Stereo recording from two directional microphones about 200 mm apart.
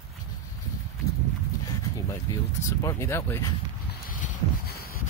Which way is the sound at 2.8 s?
15° left (ahead or behind).